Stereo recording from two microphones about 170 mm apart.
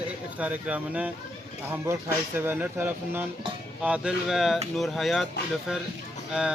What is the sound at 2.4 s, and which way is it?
Speech, 10° right (ahead or behind).